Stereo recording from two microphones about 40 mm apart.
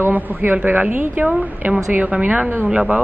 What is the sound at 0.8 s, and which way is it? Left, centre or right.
Speech, right.